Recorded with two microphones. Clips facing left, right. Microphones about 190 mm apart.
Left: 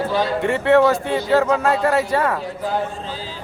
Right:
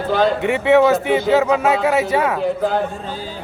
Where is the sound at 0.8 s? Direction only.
5° right (ahead or behind).